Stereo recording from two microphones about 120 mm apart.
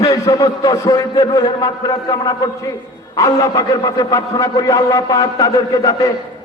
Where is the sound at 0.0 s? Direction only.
30° left (ahead or behind).